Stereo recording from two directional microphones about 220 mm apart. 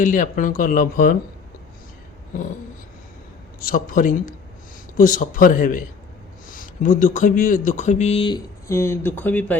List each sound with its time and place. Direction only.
0.0 s speech: 35° left (ahead or behind)
3.7 s speech: 40° left (ahead or behind); by 9.6 s 5° left (ahead or behind)